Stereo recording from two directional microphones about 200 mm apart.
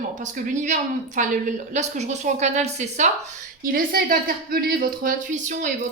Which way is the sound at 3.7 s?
45° right (ahead or behind).